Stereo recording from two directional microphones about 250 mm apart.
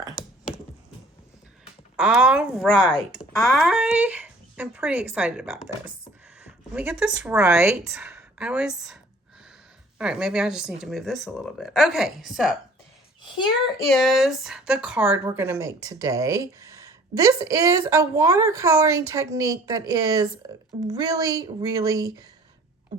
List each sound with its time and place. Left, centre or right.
2.0 s speech: centre
10.0 s speech: centre
13.2 s a child's voice: centre
13.9 s speech: centre